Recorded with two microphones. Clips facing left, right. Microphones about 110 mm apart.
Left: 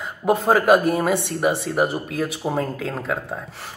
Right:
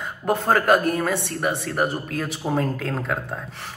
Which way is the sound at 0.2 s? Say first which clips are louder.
Left 3 dB; 5° left (ahead or behind).